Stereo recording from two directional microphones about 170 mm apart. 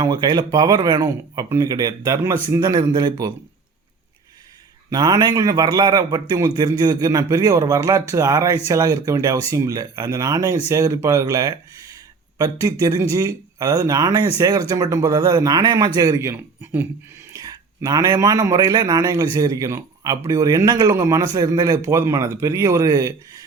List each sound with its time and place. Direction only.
0.0 s a man's voice: 25° right (ahead or behind)
4.9 s a man's voice: 25° right (ahead or behind)